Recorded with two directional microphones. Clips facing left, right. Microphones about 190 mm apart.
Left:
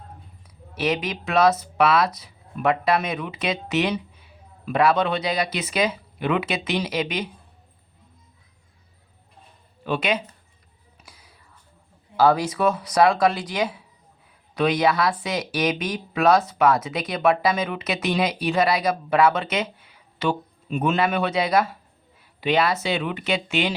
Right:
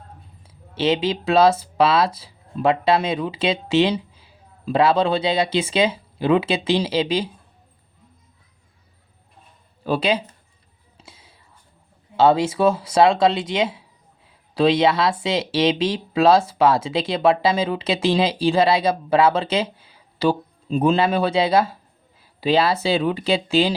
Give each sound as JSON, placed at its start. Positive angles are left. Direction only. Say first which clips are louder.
{"t": 0.4, "sound": "speech", "louder": "right 4 dB", "side_deg": -25}
{"t": 9.8, "sound": "speech", "louder": "right 3 dB", "side_deg": -35}
{"t": 10.9, "sound": "music", "louder": "right 4 dB", "side_deg": -25}
{"t": 12.1, "sound": "speech", "louder": "right 3 dB", "side_deg": -25}